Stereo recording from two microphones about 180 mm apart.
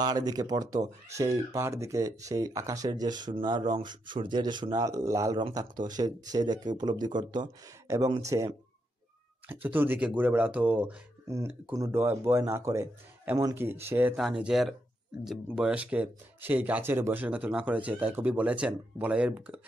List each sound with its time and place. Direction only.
0.0 s speech: 20° right (ahead or behind); by 19.6 s 5° right (ahead or behind)